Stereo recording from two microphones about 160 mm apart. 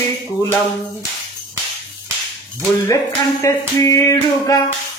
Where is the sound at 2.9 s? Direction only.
20° left (ahead or behind).